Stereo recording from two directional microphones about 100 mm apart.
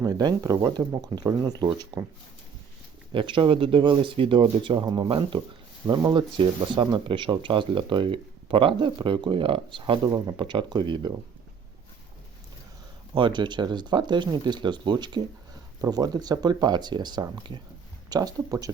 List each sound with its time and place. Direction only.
0.0 s speech: 40° right (ahead or behind)
3.1 s speech: 55° right (ahead or behind)
5.9 s speech: 45° right (ahead or behind)
13.1 s speech: 50° right (ahead or behind)
18.1 s speech: 40° right (ahead or behind)